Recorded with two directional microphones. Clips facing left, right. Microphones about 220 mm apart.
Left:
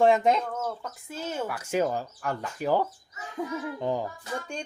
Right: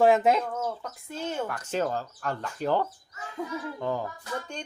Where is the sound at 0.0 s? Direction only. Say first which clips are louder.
Right 1 dB; 5° right (ahead or behind).